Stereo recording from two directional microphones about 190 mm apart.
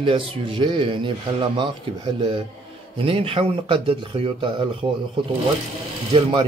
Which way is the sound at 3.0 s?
30° right (ahead or behind).